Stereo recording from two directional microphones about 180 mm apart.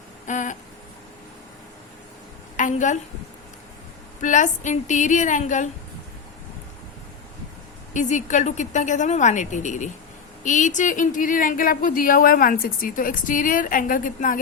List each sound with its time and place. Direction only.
0.3 s a sound: 45° left (ahead or behind)
2.6 s a woman's voice: 45° left (ahead or behind)
4.2 s speech: 45° left (ahead or behind)
7.9 s speech: 45° left (ahead or behind)